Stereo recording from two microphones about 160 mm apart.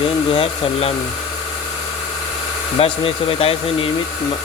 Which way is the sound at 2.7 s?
35° left (ahead or behind).